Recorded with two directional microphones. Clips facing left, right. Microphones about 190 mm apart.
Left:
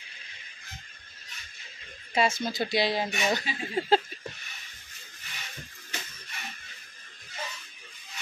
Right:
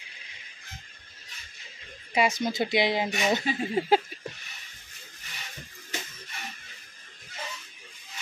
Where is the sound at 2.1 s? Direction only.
15° right (ahead or behind).